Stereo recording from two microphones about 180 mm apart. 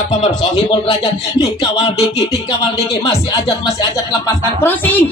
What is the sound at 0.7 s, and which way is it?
Music, 25° left (ahead or behind).